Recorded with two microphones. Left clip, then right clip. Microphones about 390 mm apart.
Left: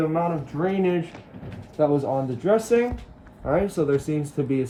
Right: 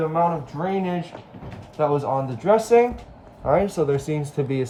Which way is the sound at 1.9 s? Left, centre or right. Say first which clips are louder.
Right 1 dB; right.